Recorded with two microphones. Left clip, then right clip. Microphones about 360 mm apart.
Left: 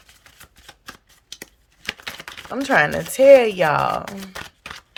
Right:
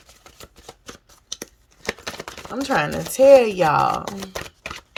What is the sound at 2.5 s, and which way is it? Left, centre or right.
Speech, centre.